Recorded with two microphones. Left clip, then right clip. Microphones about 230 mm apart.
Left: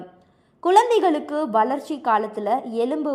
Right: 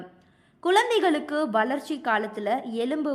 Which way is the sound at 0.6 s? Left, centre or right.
Centre.